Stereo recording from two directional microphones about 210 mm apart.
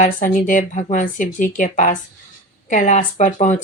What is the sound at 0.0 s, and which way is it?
Speech, 40° left (ahead or behind).